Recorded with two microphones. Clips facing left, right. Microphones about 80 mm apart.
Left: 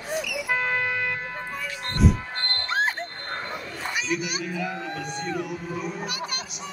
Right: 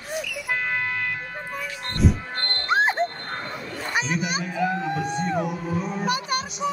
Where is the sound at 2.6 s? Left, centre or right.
Centre.